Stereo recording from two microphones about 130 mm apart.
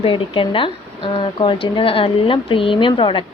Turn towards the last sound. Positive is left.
turn(degrees=40)  # may be behind; listen again after turning